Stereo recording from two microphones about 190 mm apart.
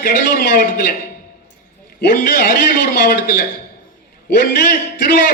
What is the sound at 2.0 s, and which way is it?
A man's voice, 55° left (ahead or behind).